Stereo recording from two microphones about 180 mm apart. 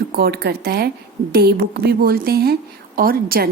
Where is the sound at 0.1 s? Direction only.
60° right (ahead or behind).